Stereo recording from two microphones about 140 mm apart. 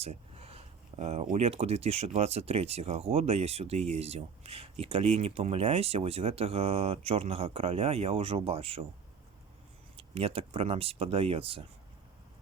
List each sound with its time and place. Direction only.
0.0 s speech: 45° right (ahead or behind)
10.0 s speech: 40° right (ahead or behind)